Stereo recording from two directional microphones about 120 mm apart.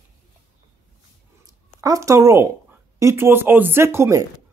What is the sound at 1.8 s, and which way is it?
Speech, 30° right (ahead or behind).